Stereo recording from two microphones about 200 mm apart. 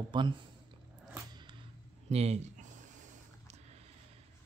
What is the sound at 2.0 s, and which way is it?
Speech, 30° right (ahead or behind).